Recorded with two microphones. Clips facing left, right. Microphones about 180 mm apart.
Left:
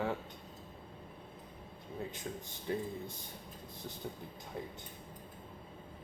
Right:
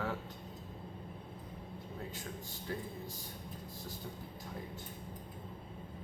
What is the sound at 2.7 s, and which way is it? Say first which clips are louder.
Speech: left 5 dB; 20° left (ahead or behind).